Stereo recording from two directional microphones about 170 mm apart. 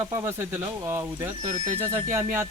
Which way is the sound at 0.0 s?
15° right (ahead or behind).